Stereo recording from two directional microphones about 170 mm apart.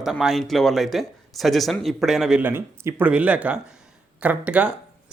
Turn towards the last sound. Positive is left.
turn(degrees=-5)  # may be behind; listen again after turning